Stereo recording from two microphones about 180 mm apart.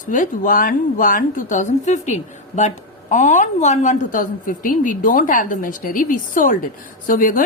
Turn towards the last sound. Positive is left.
turn(degrees=50)  # may be behind; listen again after turning